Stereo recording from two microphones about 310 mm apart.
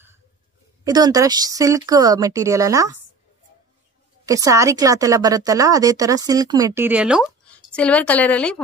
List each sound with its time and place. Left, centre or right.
0.8 s a woman's voice: centre
4.3 s a woman's voice: centre